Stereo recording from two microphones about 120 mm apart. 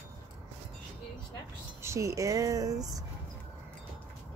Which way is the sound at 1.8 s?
25° right (ahead or behind).